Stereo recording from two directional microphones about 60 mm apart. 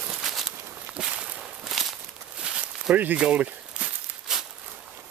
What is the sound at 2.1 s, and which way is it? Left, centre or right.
Walk, centre.